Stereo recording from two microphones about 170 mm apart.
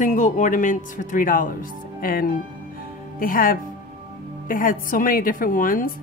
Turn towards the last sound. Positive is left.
turn(degrees=55)  # may be behind; listen again after turning